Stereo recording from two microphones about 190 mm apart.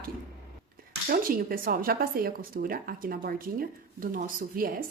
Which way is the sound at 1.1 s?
50° right (ahead or behind).